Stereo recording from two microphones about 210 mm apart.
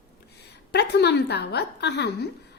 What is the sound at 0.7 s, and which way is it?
A woman's voice, 55° left (ahead or behind).